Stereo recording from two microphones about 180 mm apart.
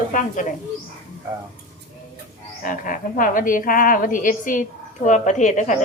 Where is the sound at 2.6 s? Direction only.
50° left (ahead or behind).